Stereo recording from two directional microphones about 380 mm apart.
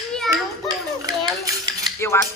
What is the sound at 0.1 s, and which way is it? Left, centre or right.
Children playing, centre.